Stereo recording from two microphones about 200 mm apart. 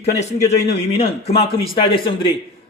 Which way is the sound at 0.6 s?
30° left (ahead or behind).